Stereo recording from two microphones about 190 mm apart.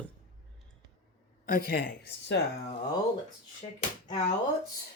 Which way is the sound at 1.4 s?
50° left (ahead or behind).